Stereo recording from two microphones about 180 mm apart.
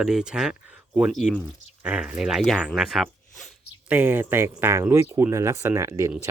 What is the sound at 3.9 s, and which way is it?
Speech, 10° right (ahead or behind).